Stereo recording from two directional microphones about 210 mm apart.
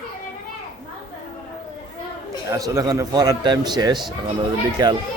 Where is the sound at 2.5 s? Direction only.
15° right (ahead or behind).